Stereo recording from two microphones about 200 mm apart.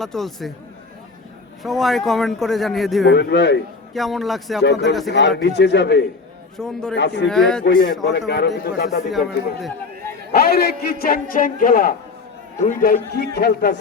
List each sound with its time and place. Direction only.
0.0 s a man's voice: centre (ahead or behind)
1.6 s a man's voice: centre (ahead or behind)
3.1 s speech: 60° left (ahead or behind)
3.9 s a man's voice: centre (ahead or behind)
4.6 s speech: 60° left (ahead or behind)
6.6 s a man's voice: centre (ahead or behind)
6.9 s speech: 60° left (ahead or behind)
7.3 s a man's voice: 5° left (ahead or behind)
7.6 s speech: 60° left (ahead or behind)
10.3 s a man's voice: 50° left (ahead or behind)